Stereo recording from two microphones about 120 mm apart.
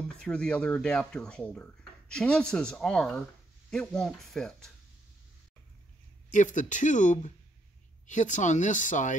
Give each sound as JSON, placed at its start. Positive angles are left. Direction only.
{"t": 0.1, "sound": "speech", "side_deg": 5}
{"t": 6.3, "sound": "speech", "side_deg": 90}